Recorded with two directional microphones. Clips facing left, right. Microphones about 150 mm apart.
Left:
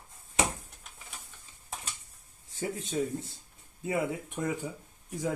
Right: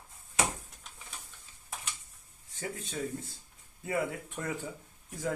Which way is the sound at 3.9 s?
15° left (ahead or behind).